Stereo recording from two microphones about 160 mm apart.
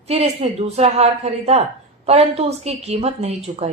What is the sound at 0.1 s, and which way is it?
A woman's voice, 40° right (ahead or behind).